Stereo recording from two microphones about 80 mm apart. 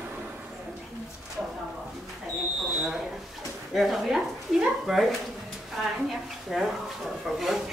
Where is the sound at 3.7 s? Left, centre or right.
Centre.